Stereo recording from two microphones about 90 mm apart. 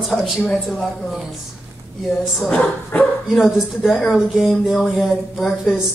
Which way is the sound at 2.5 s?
15° left (ahead or behind).